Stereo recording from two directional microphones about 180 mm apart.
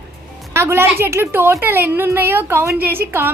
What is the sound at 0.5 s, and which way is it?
A woman's voice, 15° right (ahead or behind).